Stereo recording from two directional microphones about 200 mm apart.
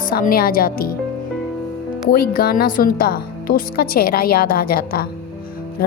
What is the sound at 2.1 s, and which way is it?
Speech, 50° left (ahead or behind).